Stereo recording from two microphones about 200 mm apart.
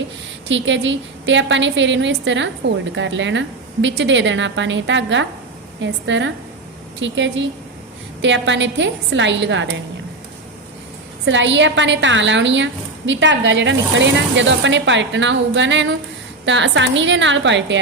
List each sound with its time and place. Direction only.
0.4 s a woman's voice: 65° right (ahead or behind)
11.3 s a woman's voice: 65° right (ahead or behind)